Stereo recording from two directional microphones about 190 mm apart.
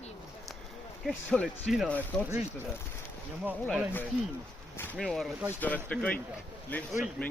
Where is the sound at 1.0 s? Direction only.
5° left (ahead or behind).